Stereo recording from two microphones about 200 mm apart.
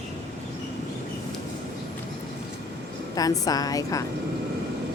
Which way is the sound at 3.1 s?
20° left (ahead or behind).